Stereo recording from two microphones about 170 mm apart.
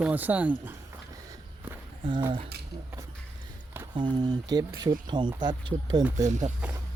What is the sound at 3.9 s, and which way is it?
Speech, 25° right (ahead or behind).